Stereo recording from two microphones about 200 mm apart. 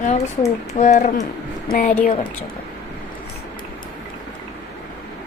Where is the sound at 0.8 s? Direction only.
40° left (ahead or behind).